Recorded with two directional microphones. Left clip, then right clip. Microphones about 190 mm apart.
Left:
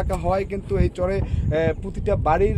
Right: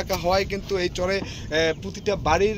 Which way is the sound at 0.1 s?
45° left (ahead or behind).